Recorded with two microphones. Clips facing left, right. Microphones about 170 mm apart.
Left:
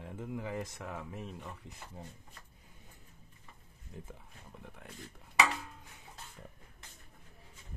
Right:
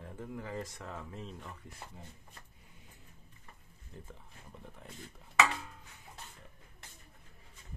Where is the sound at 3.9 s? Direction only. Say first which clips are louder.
Left 2 dB; 10° left (ahead or behind).